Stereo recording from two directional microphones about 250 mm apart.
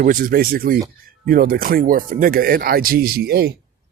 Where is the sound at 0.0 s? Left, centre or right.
Right.